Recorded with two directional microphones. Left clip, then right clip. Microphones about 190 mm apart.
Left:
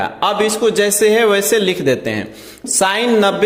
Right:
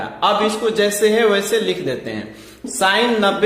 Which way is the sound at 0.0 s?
45° left (ahead or behind).